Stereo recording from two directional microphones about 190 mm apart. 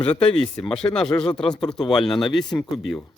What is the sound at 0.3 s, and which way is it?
Speech, 5° left (ahead or behind).